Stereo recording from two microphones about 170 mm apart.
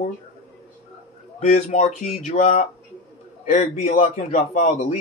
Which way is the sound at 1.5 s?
40° left (ahead or behind).